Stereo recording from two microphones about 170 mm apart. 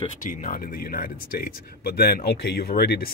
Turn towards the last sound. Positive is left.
turn(degrees=65)  # may be behind; listen again after turning